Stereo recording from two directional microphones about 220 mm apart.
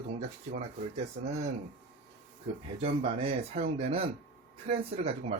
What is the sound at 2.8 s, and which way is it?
Speech, 25° right (ahead or behind).